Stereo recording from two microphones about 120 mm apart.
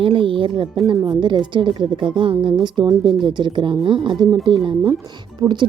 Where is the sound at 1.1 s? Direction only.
40° right (ahead or behind).